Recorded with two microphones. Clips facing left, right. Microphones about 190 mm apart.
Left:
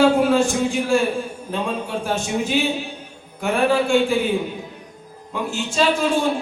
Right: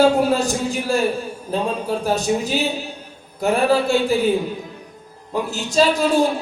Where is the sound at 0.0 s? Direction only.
40° right (ahead or behind).